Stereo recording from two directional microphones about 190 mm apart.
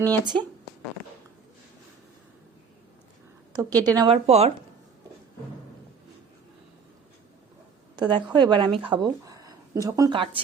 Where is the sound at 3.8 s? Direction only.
20° right (ahead or behind).